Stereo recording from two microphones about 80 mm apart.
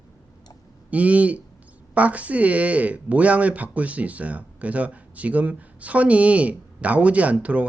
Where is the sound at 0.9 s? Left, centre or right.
Centre.